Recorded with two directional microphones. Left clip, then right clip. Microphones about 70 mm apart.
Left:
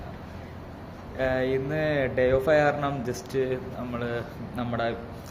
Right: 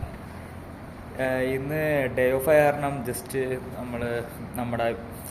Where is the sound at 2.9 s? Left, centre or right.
Left.